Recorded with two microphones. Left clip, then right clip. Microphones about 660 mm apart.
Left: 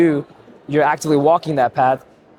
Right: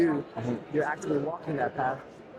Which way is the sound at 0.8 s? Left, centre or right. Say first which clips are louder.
Left 14 dB; left.